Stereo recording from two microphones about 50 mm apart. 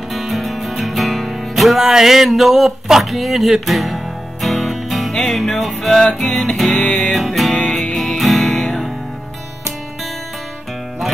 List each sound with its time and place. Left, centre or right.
0.1 s music: centre
6.8 s music: left
7.2 s music: centre